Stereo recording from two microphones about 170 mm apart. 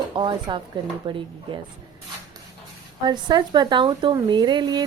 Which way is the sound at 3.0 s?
25° right (ahead or behind).